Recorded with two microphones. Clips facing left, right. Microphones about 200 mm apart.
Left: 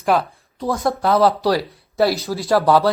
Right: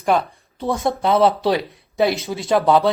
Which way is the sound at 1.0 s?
25° right (ahead or behind).